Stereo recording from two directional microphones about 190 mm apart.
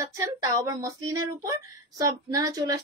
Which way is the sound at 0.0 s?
20° right (ahead or behind).